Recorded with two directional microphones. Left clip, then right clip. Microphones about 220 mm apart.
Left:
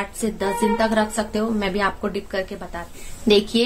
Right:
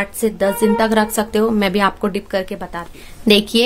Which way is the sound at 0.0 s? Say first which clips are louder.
Right 7 dB; 35° right (ahead or behind).